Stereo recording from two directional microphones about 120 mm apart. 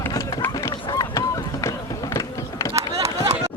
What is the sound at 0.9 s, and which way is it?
Run, 30° left (ahead or behind).